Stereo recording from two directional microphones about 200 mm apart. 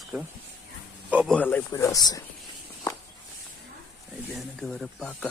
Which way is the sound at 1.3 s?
10° left (ahead or behind).